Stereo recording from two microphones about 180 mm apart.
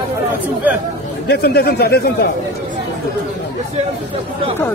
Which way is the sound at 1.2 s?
60° left (ahead or behind).